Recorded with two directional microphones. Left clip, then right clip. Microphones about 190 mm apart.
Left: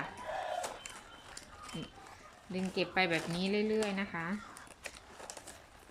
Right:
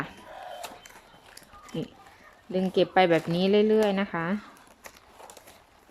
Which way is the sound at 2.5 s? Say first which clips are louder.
Right 11 dB; 35° right (ahead or behind).